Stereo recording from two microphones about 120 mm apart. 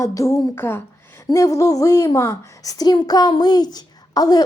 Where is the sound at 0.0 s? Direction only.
25° left (ahead or behind).